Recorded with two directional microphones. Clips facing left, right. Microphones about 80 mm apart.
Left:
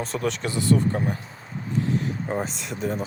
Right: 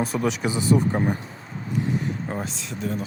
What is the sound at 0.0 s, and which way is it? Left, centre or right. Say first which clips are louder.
Speech: right 3 dB; centre.